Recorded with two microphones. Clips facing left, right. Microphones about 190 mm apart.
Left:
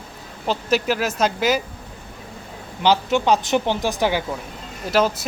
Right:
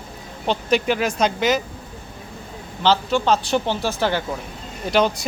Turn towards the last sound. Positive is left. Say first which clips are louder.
# even
turn(degrees=5)  # may be behind; listen again after turning